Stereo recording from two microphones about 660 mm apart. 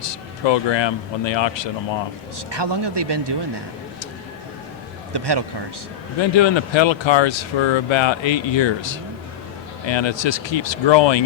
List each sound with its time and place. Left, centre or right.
0.0 s speech: left
2.5 s speech: right
5.1 s speech: right
6.1 s speech: left